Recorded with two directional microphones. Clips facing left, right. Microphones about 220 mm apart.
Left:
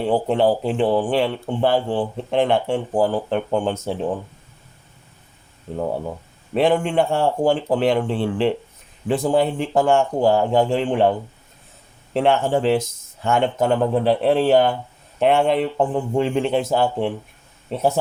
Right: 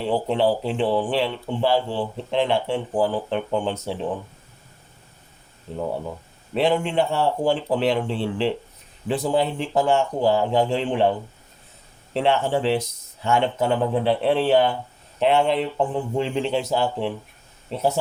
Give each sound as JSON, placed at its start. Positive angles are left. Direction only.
{"t": 0.1, "sound": "speech", "side_deg": 50}
{"t": 6.5, "sound": "speech", "side_deg": 50}
{"t": 12.1, "sound": "speech", "side_deg": 50}